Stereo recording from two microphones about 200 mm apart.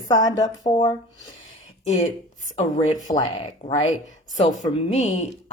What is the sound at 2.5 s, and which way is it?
A woman's voice, 25° left (ahead or behind).